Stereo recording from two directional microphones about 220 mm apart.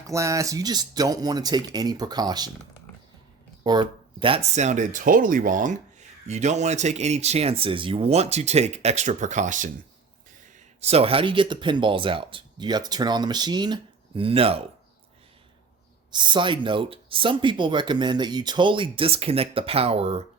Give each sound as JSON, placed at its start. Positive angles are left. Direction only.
{"t": 0.1, "sound": "speech", "side_deg": -15}
{"t": 3.6, "sound": "speech", "side_deg": -20}
{"t": 10.8, "sound": "speech", "side_deg": -30}
{"t": 16.1, "sound": "speech", "side_deg": -20}